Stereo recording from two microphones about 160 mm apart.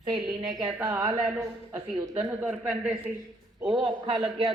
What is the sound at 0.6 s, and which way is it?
A woman's voice, 15° right (ahead or behind).